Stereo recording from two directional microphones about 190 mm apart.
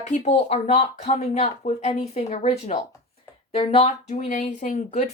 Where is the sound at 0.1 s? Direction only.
35° left (ahead or behind).